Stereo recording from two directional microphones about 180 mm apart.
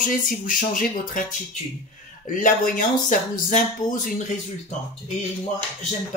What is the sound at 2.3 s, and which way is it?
Speech, 45° left (ahead or behind).